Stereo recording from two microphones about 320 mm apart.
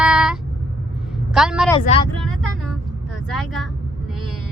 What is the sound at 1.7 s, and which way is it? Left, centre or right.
Speech, centre.